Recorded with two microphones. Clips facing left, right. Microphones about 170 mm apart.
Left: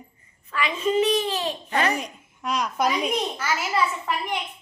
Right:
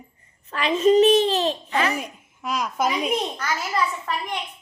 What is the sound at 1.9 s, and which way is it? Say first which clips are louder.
A child's voice: even; 5° right (ahead or behind).